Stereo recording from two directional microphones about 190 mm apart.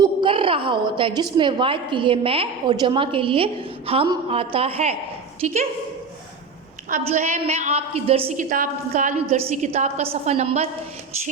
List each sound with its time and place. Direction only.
0.0 s a woman's voice: 25° right (ahead or behind)
6.9 s a woman's voice: 40° right (ahead or behind)